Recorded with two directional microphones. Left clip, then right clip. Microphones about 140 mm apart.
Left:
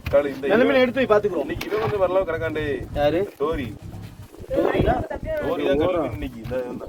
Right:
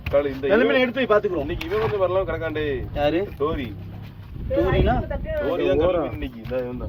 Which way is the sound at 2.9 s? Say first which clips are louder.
Left 2 dB; 45° left (ahead or behind).